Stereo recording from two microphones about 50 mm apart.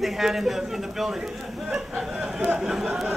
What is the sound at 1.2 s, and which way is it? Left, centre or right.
A man's voice, right.